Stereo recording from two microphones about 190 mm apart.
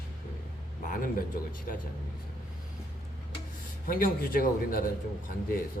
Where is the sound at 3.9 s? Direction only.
50° left (ahead or behind).